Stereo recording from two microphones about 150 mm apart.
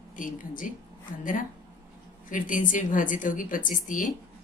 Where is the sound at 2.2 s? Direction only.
60° left (ahead or behind).